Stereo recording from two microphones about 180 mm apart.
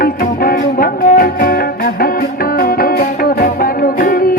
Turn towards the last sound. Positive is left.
turn(degrees=50)  # may be behind; listen again after turning